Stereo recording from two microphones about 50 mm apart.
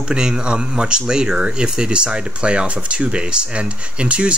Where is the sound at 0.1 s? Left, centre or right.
Centre.